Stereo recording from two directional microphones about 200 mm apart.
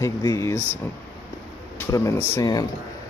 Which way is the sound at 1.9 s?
15° left (ahead or behind).